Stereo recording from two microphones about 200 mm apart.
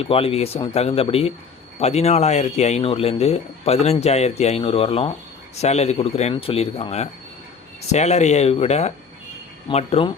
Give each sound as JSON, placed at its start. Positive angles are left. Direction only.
{"t": 0.0, "sound": "speech", "side_deg": 30}